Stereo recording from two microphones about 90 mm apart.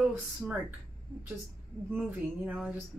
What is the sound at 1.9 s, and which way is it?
Speech, 15° right (ahead or behind).